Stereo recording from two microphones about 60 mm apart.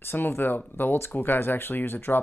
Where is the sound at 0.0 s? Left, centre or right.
Left.